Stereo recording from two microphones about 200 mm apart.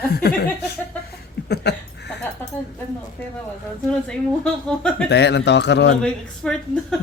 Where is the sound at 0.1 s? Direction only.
50° left (ahead or behind).